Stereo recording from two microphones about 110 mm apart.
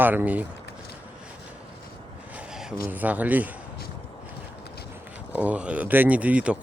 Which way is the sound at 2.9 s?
15° right (ahead or behind).